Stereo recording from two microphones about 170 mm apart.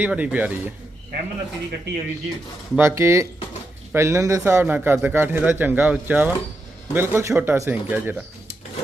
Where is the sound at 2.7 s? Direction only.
15° right (ahead or behind).